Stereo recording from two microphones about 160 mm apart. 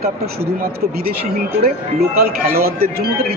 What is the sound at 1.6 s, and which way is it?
Speech, 70° right (ahead or behind).